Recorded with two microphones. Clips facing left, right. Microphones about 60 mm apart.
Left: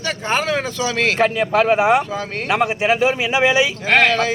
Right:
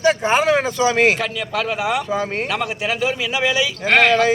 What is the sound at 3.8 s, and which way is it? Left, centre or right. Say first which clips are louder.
Speech: right 4 dB; centre.